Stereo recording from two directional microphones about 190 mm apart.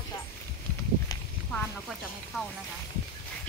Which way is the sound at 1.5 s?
Centre (ahead or behind).